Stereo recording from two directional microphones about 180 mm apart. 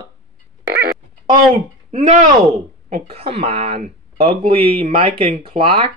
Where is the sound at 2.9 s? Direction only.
35° right (ahead or behind).